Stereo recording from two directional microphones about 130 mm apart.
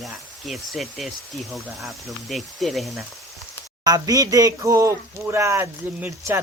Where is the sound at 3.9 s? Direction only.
30° right (ahead or behind).